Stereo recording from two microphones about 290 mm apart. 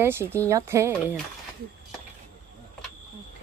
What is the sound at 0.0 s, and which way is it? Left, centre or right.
Speech, centre.